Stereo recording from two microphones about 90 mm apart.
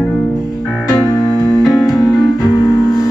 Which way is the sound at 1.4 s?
5° right (ahead or behind).